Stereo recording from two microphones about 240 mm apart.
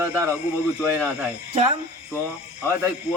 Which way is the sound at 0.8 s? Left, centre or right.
Centre.